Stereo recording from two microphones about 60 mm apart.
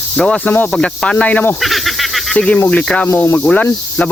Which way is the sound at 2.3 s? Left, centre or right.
Centre.